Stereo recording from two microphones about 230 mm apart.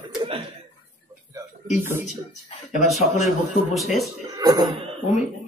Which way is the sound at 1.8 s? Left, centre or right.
Centre.